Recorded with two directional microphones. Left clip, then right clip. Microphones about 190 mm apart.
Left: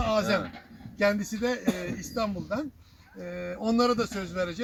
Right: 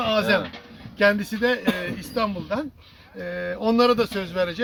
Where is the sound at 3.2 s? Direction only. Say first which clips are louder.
Right 7 dB; 10° right (ahead or behind).